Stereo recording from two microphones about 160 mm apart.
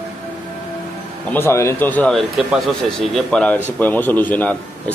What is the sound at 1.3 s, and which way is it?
Speech, 15° left (ahead or behind).